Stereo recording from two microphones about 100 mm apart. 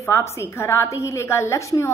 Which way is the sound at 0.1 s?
30° left (ahead or behind).